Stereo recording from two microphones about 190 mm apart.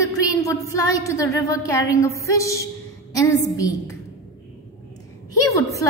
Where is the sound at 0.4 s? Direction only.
15° left (ahead or behind).